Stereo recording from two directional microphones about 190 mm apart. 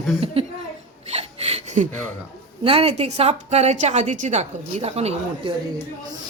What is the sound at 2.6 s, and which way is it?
A woman's voice, 30° right (ahead or behind).